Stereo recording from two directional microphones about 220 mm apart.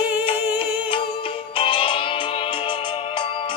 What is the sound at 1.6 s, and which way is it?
Music, 25° left (ahead or behind).